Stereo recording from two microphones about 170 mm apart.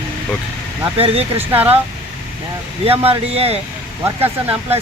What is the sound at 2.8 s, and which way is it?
Speech, 35° right (ahead or behind).